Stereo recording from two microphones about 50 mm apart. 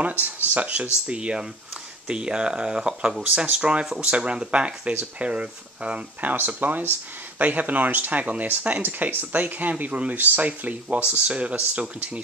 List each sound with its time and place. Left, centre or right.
0.0 s speech: right; by 3.3 s centre
3.3 s speech: right
6.3 s speech: right